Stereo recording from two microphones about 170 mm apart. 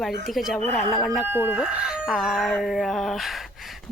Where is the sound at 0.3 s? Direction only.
Centre (ahead or behind).